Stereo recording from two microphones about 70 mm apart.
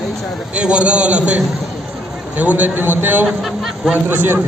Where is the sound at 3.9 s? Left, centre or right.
Right.